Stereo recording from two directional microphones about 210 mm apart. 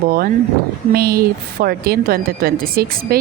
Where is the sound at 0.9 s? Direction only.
45° right (ahead or behind).